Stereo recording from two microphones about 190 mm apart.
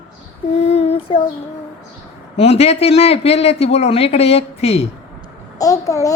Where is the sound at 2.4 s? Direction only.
30° left (ahead or behind).